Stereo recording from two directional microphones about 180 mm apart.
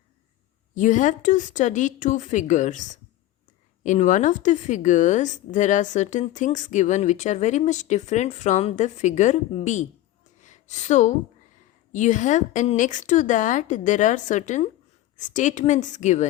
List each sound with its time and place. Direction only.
0.7 s a woman's voice: 45° left (ahead or behind)